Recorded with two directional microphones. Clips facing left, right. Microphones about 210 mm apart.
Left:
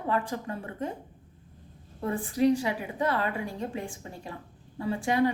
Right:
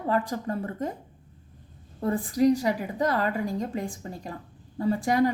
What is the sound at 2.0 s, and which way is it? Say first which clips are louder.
A woman's voice: right 3 dB; 40° right (ahead or behind).